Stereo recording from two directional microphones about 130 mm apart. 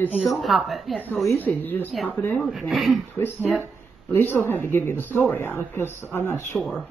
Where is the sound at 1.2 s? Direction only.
15° left (ahead or behind).